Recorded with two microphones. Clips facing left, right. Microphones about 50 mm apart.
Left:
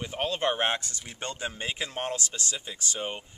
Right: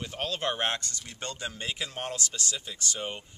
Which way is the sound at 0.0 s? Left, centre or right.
Centre.